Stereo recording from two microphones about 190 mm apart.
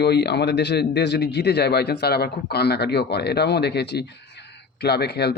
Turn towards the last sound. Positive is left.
turn(degrees=60)  # may be behind; listen again after turning